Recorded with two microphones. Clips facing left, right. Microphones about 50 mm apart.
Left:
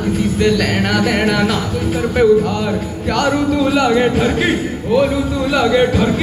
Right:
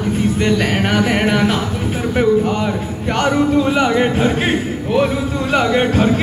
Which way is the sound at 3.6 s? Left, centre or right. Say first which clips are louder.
Left 1 dB; right.